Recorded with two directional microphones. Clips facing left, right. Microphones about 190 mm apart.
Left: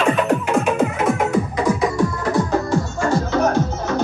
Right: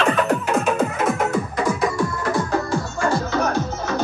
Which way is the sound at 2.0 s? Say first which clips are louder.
Left 3 dB; 20° left (ahead or behind).